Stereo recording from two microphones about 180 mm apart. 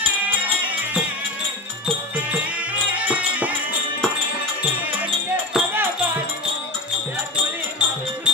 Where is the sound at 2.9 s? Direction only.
5° right (ahead or behind).